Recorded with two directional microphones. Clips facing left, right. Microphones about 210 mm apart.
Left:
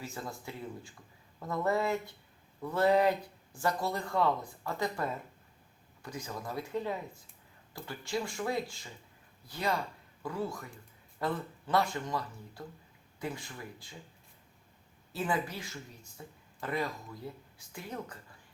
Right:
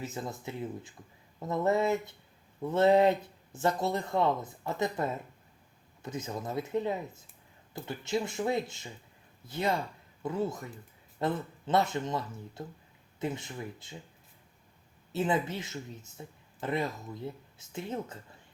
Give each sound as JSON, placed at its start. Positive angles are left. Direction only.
{"t": 0.0, "sound": "speech", "side_deg": -20}
{"t": 15.1, "sound": "speech", "side_deg": -25}